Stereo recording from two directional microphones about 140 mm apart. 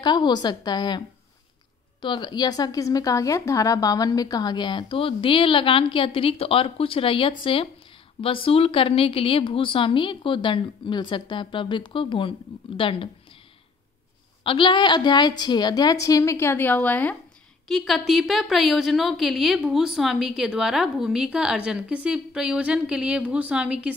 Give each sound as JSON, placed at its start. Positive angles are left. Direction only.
{"t": 0.0, "sound": "a woman's voice", "side_deg": 30}
{"t": 14.4, "sound": "a woman's voice", "side_deg": 35}
{"t": 17.6, "sound": "a woman's voice", "side_deg": 0}